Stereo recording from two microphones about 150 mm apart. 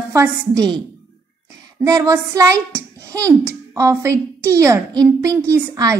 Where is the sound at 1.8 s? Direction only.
20° right (ahead or behind).